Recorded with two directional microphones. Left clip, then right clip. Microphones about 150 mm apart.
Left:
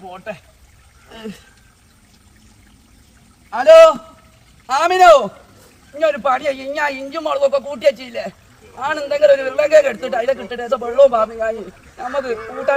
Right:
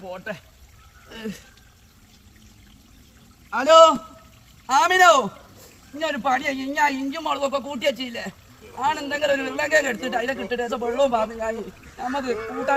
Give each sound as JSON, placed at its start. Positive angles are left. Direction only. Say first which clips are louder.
{"t": 3.5, "sound": "a man's voice", "louder": "left 6 dB", "side_deg": 10}